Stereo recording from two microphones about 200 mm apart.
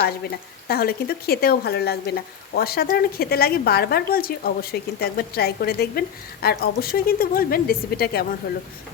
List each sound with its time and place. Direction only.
0.0 s a woman's voice: 50° left (ahead or behind)